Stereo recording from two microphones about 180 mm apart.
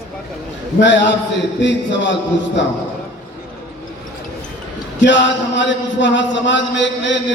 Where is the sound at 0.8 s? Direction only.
85° left.